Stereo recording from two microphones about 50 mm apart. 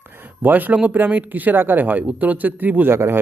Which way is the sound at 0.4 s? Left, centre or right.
Right.